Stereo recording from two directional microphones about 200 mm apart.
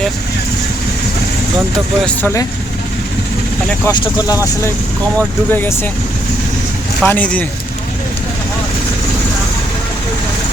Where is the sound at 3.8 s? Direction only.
20° left (ahead or behind).